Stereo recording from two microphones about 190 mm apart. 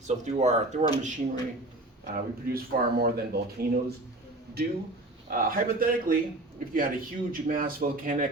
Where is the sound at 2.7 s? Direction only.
50° right (ahead or behind).